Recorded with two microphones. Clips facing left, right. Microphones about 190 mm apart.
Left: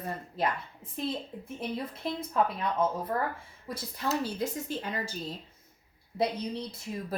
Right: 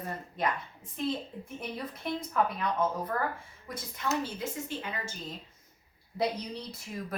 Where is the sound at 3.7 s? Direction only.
30° left (ahead or behind).